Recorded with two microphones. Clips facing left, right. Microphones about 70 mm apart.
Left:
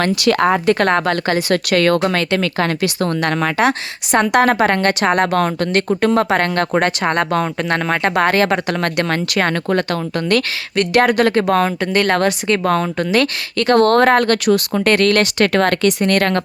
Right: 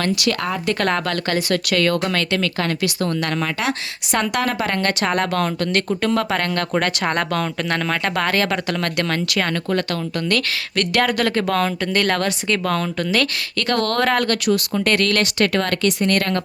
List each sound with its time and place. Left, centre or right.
0.0 s speech: left
0.8 s speech: left
1.5 s speech: left
2.0 s speech: left
7.0 s speech: centre
7.3 s speech: left
11.3 s speech: centre
11.5 s speech: left
11.9 s speech: centre
12.1 s speech: left
13.1 s speech: centre
13.7 s speech: left
15.9 s speech: left